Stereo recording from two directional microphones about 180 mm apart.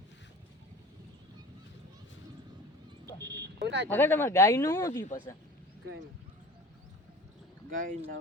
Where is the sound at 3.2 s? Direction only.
65° right (ahead or behind).